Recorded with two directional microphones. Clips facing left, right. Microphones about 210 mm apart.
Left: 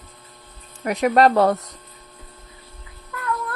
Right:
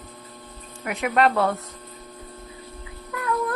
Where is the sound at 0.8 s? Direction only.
40° left (ahead or behind).